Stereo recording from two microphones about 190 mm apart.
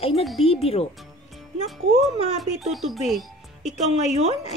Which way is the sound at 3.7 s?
35° right (ahead or behind).